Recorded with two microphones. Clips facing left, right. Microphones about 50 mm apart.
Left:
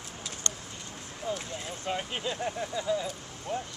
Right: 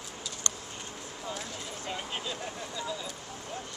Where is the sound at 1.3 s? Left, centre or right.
Left.